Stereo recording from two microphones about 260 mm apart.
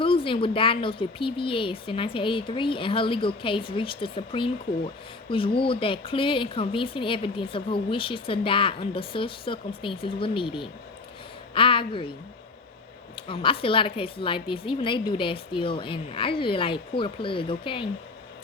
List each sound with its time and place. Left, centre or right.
0.0 s speech: centre
13.1 s speech: centre